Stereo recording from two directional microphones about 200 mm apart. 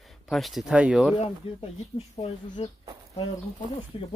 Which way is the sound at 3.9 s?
25° left (ahead or behind).